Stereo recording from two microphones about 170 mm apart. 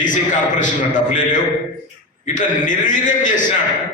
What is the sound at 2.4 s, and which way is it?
A man's voice, 50° left (ahead or behind).